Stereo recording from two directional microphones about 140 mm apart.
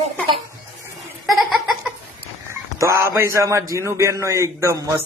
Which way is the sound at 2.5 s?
20° right (ahead or behind).